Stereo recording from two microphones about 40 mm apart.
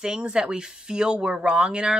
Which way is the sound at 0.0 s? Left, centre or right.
Right.